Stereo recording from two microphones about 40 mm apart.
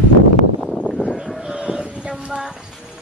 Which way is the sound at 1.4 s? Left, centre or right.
Centre.